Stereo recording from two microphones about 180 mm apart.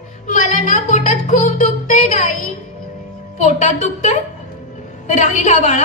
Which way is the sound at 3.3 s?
40° left (ahead or behind).